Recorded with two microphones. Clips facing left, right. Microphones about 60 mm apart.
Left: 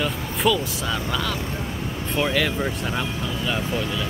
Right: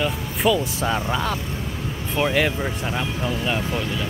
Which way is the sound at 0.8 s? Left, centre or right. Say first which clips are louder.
Right 3 dB; right.